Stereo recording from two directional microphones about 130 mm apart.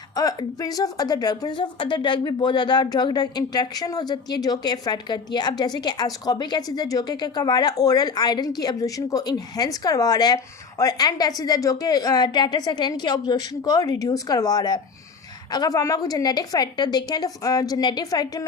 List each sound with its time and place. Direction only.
0.2 s a woman's voice: 30° left (ahead or behind)